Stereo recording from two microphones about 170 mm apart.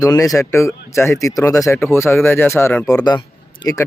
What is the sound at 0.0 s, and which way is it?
Speech, 20° left (ahead or behind).